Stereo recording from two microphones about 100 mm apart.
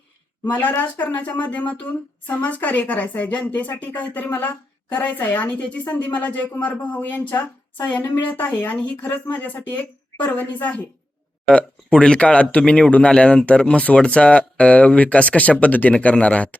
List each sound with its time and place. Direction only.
0.5 s speech: 20° left (ahead or behind)